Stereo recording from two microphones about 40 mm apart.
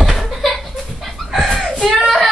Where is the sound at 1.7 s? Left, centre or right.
Right.